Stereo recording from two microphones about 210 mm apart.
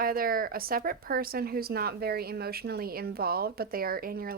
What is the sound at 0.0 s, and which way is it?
Speech, 45° right (ahead or behind).